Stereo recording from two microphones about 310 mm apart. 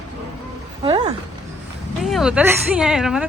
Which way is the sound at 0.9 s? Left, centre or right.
Centre.